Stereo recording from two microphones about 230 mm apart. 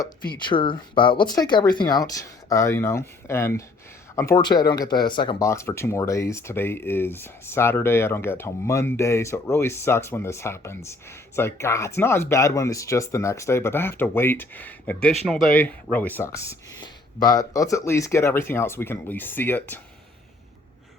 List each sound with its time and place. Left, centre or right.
0.0 s speech: centre